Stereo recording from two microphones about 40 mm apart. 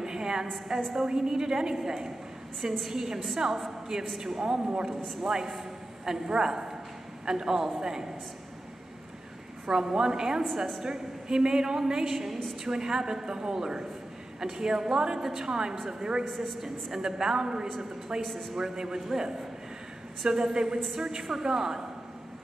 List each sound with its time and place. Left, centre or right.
0.0 s a woman's voice: centre
4.4 s a man's voice: centre
5.2 s a man's voice: centre
6.2 s a woman's voice: centre
9.7 s a woman's voice: centre
16.3 s a woman's voice: centre
16.6 s a woman's voice: centre
17.6 s a woman's voice: centre
18.6 s a woman's voice: centre
18.9 s a woman's voice: centre
20.2 s a woman's voice: centre